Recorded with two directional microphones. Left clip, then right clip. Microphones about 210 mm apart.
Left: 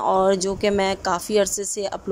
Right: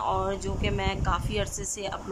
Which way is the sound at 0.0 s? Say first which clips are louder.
Left 9 dB; 25° left (ahead or behind).